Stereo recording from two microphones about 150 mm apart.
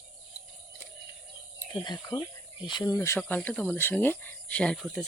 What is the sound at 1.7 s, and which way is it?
Speech, 25° left (ahead or behind).